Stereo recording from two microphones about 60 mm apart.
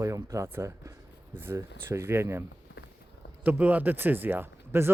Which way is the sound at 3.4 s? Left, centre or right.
Right.